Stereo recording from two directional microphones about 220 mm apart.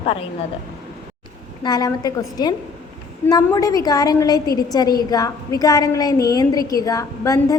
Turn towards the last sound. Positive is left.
turn(degrees=15)  # may be behind; listen again after turning